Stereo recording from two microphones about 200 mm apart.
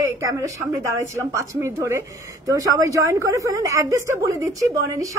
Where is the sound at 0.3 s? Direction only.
15° right (ahead or behind).